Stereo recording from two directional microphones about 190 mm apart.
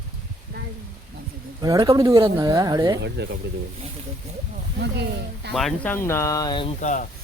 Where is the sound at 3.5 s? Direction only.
60° right (ahead or behind).